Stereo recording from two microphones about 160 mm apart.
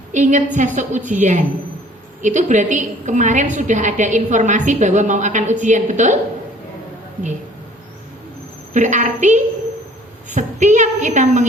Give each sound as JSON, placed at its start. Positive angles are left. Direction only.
{"t": 0.1, "sound": "a woman's voice", "side_deg": -50}
{"t": 8.7, "sound": "a woman's voice", "side_deg": -50}